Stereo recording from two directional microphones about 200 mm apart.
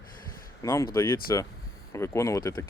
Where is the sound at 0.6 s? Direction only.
15° left (ahead or behind).